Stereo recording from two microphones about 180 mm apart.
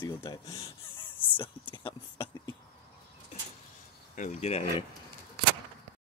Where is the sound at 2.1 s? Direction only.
15° left (ahead or behind).